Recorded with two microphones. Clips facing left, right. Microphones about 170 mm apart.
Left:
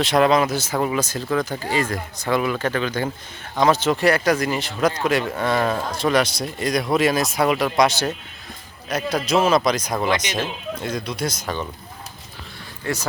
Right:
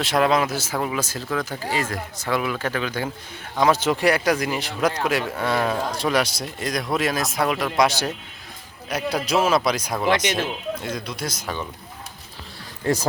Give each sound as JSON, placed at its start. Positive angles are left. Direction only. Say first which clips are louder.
{"t": 0.0, "sound": "speech", "louder": "left 3 dB", "side_deg": -5}
{"t": 7.8, "sound": "speech", "louder": "left 2 dB", "side_deg": -10}
{"t": 10.1, "sound": "speech", "louder": "right 5 dB", "side_deg": -55}
{"t": 10.4, "sound": "speech", "louder": "even", "side_deg": 0}